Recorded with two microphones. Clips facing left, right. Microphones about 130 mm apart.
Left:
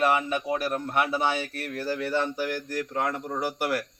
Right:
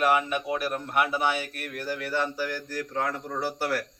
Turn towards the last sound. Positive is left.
turn(degrees=15)  # may be behind; listen again after turning